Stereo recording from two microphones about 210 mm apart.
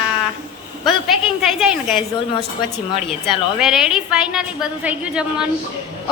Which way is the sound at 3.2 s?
Centre (ahead or behind).